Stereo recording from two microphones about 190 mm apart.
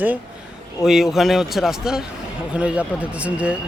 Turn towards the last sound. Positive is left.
turn(degrees=-5)  # may be behind; listen again after turning